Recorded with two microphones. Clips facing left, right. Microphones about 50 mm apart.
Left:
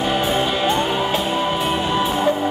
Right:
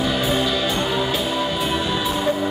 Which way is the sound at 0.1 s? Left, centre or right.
Left.